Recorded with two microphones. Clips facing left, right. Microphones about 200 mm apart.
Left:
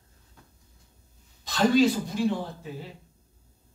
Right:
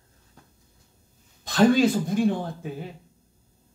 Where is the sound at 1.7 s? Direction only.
55° right (ahead or behind).